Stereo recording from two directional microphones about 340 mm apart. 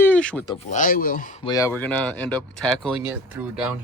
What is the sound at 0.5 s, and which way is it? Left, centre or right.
Speech, left.